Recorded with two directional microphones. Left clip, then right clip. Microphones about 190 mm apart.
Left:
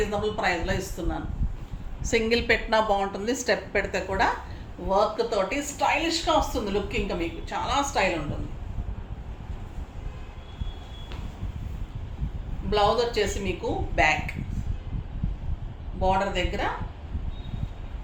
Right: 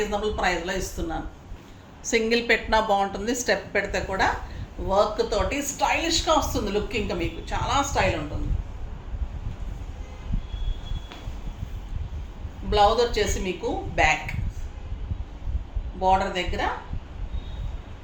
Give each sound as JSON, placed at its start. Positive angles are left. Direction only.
{"t": 0.1, "sound": "a woman's voice", "side_deg": -5}
{"t": 4.9, "sound": "speech", "side_deg": -10}
{"t": 12.7, "sound": "a woman's voice", "side_deg": 0}
{"t": 16.0, "sound": "a woman's voice", "side_deg": 0}